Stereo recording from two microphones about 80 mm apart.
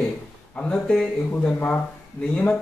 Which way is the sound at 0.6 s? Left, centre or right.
Centre.